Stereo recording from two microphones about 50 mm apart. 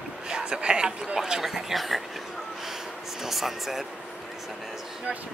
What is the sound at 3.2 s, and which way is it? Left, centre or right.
Speech, centre.